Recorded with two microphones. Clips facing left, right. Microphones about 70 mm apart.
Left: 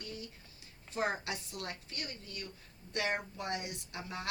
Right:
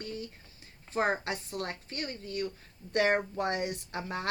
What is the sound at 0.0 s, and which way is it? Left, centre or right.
A woman's voice, right.